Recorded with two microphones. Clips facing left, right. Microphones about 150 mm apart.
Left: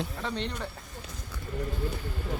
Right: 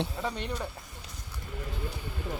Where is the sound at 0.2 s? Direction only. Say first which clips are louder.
Even; 10° right (ahead or behind).